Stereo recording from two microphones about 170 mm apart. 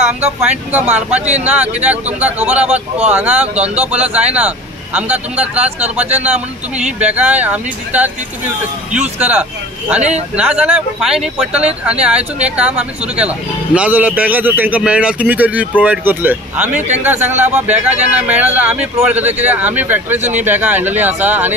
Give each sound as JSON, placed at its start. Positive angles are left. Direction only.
{"t": 0.2, "sound": "a man's voice", "side_deg": -10}
{"t": 9.2, "sound": "a man's voice", "side_deg": -10}
{"t": 20.2, "sound": "speech", "side_deg": -40}
{"t": 20.4, "sound": "a man's voice", "side_deg": -10}